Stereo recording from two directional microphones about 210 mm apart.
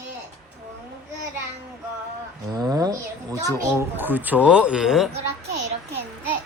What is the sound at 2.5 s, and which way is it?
Speech, 15° right (ahead or behind).